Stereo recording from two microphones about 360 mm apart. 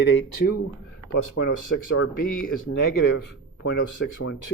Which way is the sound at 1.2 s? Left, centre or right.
Left.